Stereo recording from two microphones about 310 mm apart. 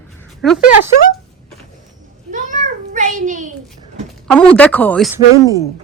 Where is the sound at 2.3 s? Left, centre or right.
Right.